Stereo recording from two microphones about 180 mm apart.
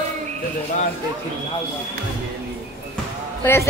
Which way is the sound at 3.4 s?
15° left (ahead or behind).